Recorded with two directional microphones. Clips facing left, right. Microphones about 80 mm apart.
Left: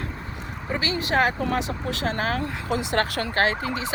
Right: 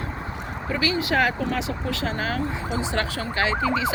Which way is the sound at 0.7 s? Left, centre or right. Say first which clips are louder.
Right 2 dB; left.